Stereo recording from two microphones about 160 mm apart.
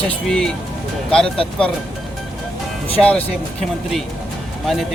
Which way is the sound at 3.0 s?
5° left (ahead or behind).